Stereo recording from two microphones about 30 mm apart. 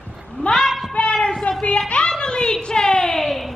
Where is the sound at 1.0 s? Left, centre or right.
Left.